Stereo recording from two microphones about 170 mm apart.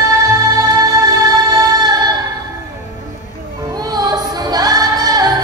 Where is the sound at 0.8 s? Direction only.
20° right (ahead or behind).